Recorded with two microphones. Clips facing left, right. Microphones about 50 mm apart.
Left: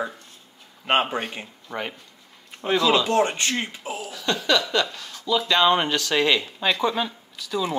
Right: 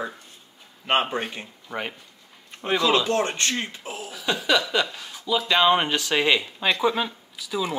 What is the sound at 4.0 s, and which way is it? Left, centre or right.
Speech, centre.